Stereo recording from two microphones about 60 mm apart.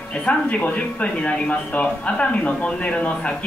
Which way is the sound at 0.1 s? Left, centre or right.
Left.